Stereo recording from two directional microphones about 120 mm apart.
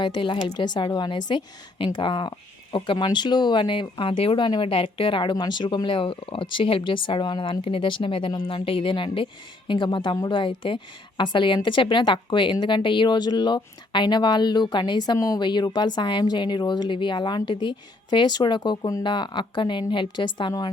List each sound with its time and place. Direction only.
0.0 s a woman's voice: 40° left (ahead or behind)